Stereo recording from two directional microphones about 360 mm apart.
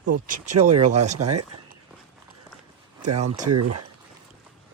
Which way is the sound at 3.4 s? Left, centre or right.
Right.